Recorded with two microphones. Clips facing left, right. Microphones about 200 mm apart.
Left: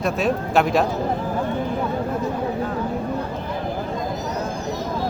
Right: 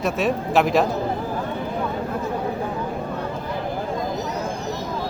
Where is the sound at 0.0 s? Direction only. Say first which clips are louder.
Left 1 dB; centre (ahead or behind).